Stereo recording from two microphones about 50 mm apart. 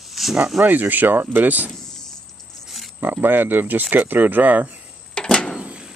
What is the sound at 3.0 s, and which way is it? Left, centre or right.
Speech, right.